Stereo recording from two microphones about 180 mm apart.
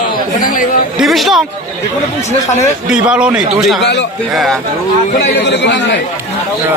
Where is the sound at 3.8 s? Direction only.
70° left (ahead or behind).